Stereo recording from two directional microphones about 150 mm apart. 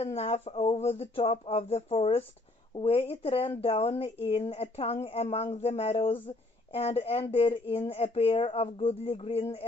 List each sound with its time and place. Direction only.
0.0 s speech: 45° left (ahead or behind)